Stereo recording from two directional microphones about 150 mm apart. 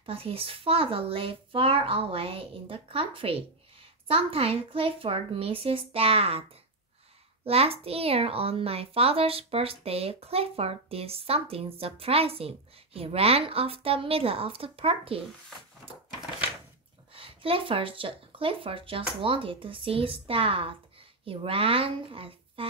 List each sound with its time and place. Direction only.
0.0 s a child's voice: 40° right (ahead or behind)
7.4 s a child's voice: 40° right (ahead or behind)
17.1 s a child's voice: 40° right (ahead or behind)